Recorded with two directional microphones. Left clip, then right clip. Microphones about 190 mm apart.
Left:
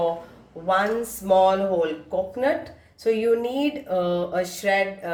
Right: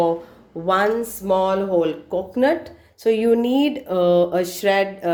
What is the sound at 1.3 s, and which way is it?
Speech, 45° right (ahead or behind).